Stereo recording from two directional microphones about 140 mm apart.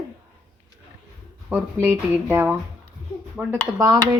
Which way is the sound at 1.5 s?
15° right (ahead or behind).